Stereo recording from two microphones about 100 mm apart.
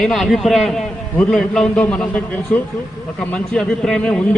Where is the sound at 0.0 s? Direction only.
5° left (ahead or behind).